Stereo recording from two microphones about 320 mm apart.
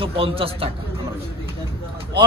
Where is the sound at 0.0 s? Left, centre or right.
Centre.